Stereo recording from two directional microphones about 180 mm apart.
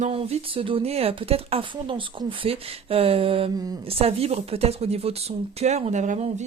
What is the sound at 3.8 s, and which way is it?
Speech, 35° right (ahead or behind).